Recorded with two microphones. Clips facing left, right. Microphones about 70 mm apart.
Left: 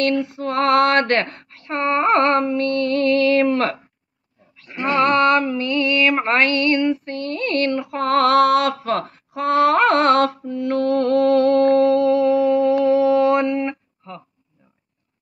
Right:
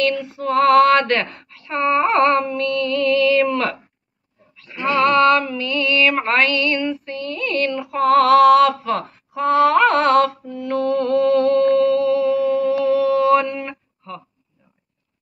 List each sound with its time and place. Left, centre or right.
0.4 s female singing: left
4.6 s a sound: left
6.2 s female singing: left
13.3 s speech: centre